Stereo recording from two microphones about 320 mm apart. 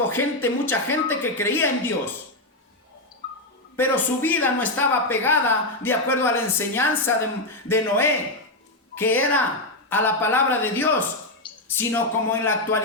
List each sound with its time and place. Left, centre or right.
0.1 s speech: centre
3.2 s a sound: right
3.8 s a man's voice: centre